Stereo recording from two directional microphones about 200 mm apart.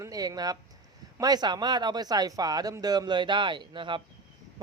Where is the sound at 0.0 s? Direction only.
20° right (ahead or behind).